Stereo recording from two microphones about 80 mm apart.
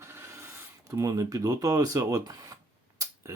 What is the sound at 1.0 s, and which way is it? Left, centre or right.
Speech, right.